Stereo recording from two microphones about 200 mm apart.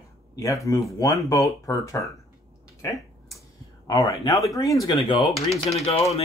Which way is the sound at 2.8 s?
15° left (ahead or behind).